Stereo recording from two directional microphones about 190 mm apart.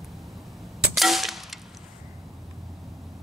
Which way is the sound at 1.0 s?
Centre (ahead or behind).